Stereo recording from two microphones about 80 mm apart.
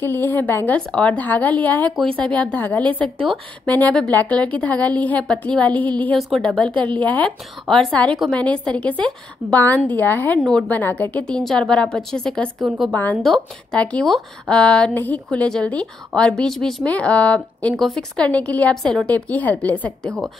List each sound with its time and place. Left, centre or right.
0.0 s a woman's voice: left
0.7 s a woman's voice: centre
3.0 s a woman's voice: centre
3.6 s a woman's voice: centre
6.1 s a woman's voice: centre
7.6 s a woman's voice: centre
7.9 s a woman's voice: centre
12.9 s a woman's voice: centre
13.2 s a woman's voice: centre
16.8 s a woman's voice: centre
18.8 s a woman's voice: centre
19.0 s a woman's voice: centre